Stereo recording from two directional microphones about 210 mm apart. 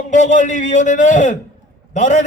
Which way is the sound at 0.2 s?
35° left (ahead or behind).